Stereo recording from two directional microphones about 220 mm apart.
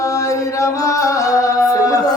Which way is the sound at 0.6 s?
15° left (ahead or behind).